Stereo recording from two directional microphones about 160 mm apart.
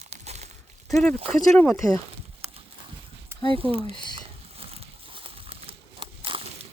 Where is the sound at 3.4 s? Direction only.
35° right (ahead or behind).